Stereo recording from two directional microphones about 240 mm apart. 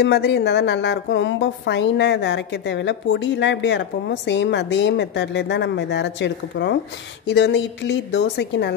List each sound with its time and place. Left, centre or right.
0.0 s a woman's voice: left